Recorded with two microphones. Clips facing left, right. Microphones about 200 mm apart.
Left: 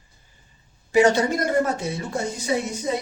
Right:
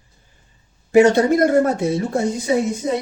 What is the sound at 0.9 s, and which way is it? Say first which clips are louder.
Speech: right 5 dB; 55° right (ahead or behind).